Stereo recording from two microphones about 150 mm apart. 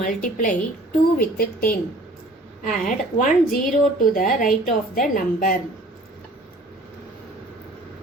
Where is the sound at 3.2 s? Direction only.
65° left (ahead or behind).